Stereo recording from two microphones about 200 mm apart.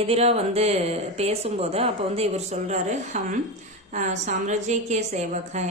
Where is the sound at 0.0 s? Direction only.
30° right (ahead or behind).